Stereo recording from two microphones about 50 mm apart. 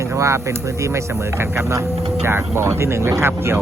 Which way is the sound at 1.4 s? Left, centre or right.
Right.